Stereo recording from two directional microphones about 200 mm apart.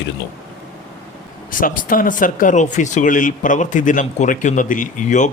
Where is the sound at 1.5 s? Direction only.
45° left (ahead or behind).